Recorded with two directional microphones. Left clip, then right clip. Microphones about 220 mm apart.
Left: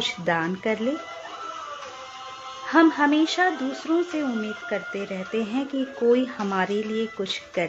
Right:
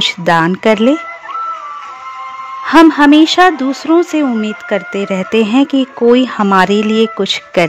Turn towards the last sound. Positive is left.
turn(degrees=-50)  # may be behind; listen again after turning